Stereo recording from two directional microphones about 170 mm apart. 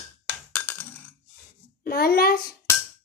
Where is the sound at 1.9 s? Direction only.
60° left (ahead or behind).